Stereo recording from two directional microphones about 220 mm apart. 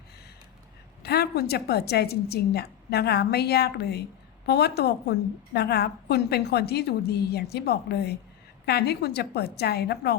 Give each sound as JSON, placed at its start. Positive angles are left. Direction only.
{"t": 1.0, "sound": "a woman's voice", "side_deg": 45}